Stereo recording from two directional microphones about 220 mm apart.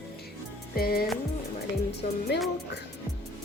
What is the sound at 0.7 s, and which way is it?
Music, 45° left (ahead or behind).